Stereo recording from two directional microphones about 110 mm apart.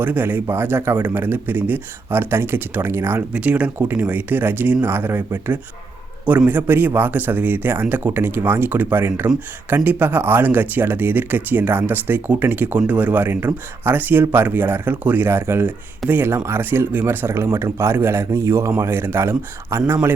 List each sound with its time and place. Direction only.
0.0 s speech: 15° right (ahead or behind)